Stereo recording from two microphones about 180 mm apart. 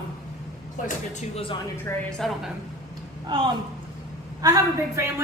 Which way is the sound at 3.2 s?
30° right (ahead or behind).